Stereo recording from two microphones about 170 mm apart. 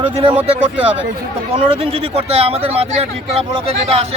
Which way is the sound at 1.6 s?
35° right (ahead or behind).